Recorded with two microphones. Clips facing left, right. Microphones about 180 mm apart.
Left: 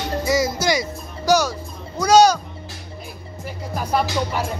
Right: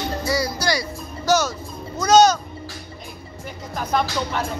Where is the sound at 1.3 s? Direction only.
15° left (ahead or behind).